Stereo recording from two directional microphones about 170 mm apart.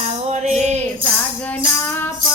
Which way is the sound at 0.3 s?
40° right (ahead or behind).